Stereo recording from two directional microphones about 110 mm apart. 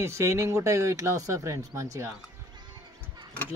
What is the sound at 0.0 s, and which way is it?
Speech, 25° right (ahead or behind).